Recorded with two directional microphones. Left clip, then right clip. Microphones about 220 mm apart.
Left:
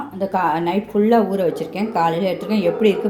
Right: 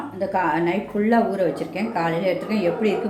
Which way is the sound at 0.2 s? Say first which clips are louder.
Left 2 dB; 30° left (ahead or behind).